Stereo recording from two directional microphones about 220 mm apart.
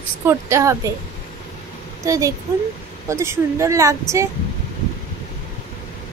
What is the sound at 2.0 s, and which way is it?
A woman's voice, 15° right (ahead or behind).